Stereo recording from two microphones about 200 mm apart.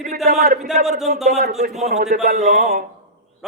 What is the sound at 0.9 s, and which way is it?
Speech, centre (ahead or behind).